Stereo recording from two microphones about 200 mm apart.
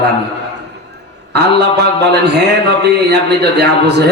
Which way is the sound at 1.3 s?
55° right (ahead or behind).